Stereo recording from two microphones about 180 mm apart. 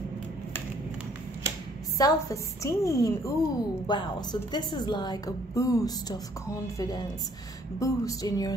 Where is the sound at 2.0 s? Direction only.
20° left (ahead or behind).